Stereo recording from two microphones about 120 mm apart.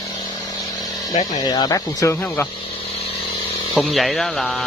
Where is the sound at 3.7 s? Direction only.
Centre (ahead or behind).